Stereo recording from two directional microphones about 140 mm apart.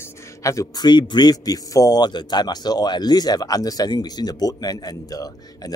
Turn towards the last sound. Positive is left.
turn(degrees=25)  # may be behind; listen again after turning